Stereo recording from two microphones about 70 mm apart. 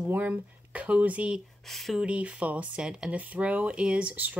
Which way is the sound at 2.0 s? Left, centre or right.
Centre.